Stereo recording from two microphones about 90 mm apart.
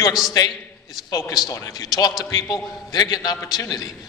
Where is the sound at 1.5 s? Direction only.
40° left (ahead or behind).